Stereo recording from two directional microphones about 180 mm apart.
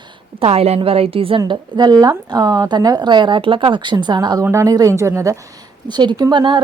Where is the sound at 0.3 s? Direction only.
35° right (ahead or behind).